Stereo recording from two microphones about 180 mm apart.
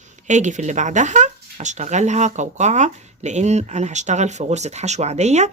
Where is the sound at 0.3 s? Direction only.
40° right (ahead or behind).